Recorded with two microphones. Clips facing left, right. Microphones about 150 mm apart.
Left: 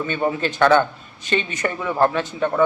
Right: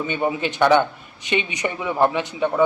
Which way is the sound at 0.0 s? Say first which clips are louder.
Left 1 dB; 15° right (ahead or behind).